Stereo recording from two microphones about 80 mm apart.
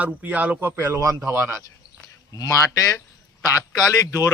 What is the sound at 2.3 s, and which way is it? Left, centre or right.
A man's voice, left.